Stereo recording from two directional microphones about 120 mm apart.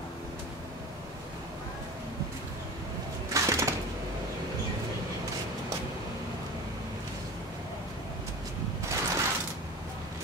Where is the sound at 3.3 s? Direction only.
25° right (ahead or behind).